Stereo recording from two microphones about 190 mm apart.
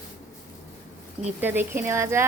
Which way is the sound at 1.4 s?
10° right (ahead or behind).